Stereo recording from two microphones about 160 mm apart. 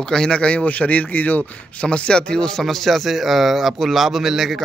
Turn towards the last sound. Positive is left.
turn(degrees=0)  # may be behind; listen again after turning